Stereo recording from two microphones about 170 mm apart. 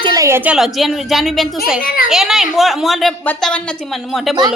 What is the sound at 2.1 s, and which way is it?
A woman's voice, centre (ahead or behind).